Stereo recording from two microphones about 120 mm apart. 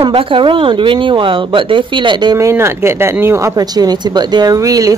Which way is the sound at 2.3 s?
20° right (ahead or behind).